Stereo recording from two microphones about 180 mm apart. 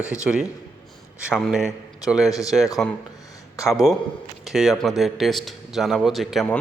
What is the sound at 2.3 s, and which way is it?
Speech, 20° left (ahead or behind).